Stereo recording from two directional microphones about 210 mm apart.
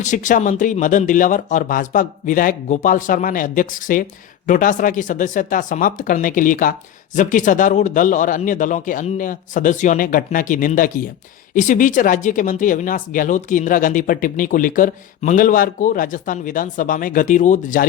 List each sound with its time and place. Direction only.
0.0 s speech: 35° left (ahead or behind)